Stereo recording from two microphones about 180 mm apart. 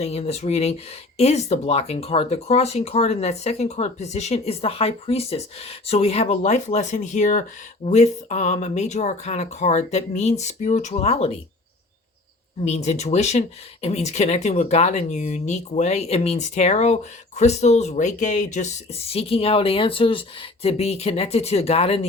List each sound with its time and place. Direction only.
0.0 s speech: 35° left (ahead or behind)
12.6 s speech: 35° left (ahead or behind)